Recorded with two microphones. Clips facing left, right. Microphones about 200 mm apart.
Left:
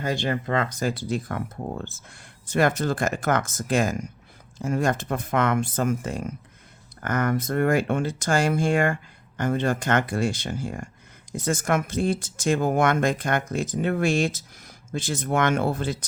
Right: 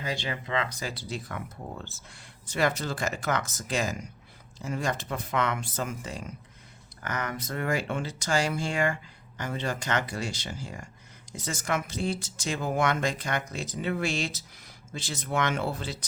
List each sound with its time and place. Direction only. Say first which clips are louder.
0.0 s speech: left 7 dB; 50° left (ahead or behind)